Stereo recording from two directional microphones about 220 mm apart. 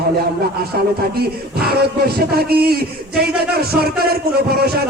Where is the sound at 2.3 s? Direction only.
45° right (ahead or behind).